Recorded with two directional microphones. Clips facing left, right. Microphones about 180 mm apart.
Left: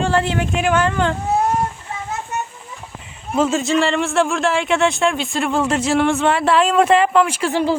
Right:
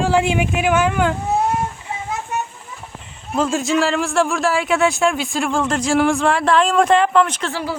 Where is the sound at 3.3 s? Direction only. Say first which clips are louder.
Left 1 dB; centre (ahead or behind).